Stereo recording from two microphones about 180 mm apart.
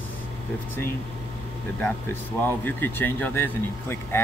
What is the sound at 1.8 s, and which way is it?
Speech, 10° left (ahead or behind).